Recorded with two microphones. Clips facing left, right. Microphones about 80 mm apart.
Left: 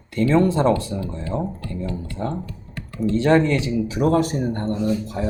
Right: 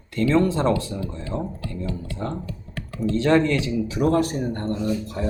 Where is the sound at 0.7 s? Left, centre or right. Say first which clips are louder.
Left 2 dB; left.